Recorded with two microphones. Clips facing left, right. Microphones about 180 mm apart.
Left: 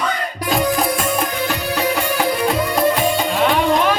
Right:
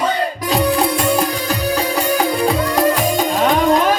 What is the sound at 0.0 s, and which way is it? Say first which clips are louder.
Music: right 4 dB; 30° right (ahead or behind).